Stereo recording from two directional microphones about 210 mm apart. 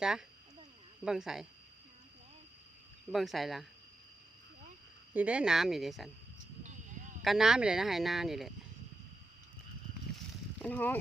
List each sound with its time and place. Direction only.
0.0 s speech: 5° right (ahead or behind)
3.1 s speech: centre (ahead or behind)
5.1 s speech: 5° right (ahead or behind)
6.6 s a sound: 35° right (ahead or behind)
7.3 s speech: centre (ahead or behind)
10.6 s speech: 5° left (ahead or behind)